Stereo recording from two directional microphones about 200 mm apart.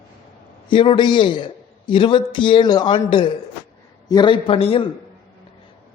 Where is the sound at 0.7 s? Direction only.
25° left (ahead or behind).